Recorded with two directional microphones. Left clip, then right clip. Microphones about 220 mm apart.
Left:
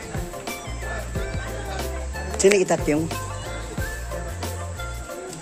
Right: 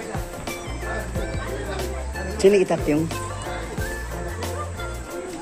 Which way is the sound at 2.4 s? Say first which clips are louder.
Right 1 dB; 25° left (ahead or behind).